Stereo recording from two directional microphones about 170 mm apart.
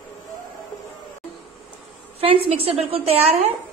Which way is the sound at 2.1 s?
35° right (ahead or behind).